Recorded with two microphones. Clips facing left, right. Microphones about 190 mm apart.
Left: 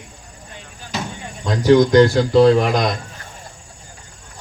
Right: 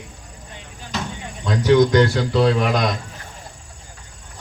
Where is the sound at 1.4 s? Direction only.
35° left (ahead or behind).